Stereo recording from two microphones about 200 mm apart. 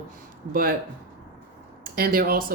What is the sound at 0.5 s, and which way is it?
Speech, 45° right (ahead or behind).